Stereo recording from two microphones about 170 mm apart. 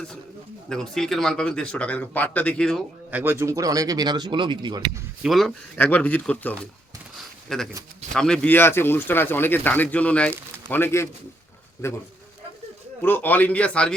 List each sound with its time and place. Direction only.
0.7 s speech: 5° left (ahead or behind)
3.1 s speech: 10° right (ahead or behind); by 4.8 s 25° right (ahead or behind)
5.2 s speech: centre (ahead or behind)